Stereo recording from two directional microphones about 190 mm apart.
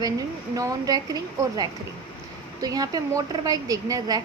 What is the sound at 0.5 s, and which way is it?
A woman's voice, 20° right (ahead or behind).